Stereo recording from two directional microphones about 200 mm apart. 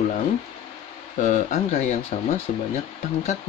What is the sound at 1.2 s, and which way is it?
Speech, 35° left (ahead or behind).